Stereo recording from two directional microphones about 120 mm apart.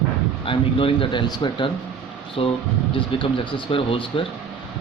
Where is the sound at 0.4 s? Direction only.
50° left (ahead or behind).